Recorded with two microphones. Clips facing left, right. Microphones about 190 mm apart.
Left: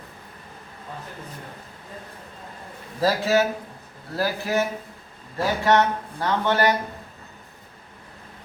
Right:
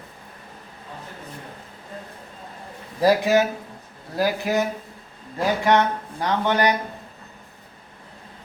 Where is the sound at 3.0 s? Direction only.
15° right (ahead or behind).